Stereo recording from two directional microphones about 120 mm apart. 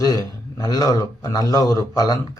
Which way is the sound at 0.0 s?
30° left (ahead or behind).